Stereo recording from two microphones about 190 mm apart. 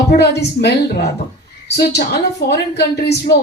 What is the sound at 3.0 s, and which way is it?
Speech, 60° left (ahead or behind).